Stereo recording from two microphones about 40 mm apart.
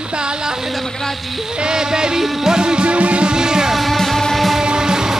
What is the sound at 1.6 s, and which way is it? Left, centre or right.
Music, centre.